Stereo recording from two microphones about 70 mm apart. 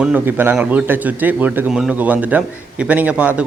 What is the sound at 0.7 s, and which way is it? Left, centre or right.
Speech, right.